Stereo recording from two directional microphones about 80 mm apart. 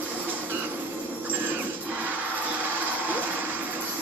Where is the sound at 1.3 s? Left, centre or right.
Right.